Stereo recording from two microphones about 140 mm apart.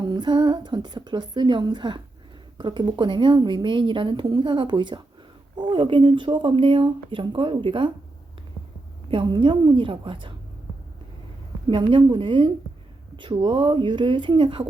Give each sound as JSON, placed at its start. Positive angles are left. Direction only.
{"t": 0.1, "sound": "a woman's voice", "side_deg": -30}
{"t": 9.0, "sound": "a woman's voice", "side_deg": -35}
{"t": 11.7, "sound": "a woman's voice", "side_deg": -35}